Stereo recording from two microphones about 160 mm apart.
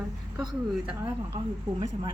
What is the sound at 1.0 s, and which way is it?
Speech, 25° right (ahead or behind).